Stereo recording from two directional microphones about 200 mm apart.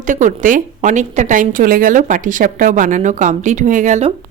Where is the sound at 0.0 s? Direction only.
40° right (ahead or behind).